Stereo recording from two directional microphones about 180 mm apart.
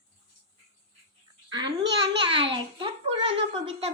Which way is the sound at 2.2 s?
30° right (ahead or behind).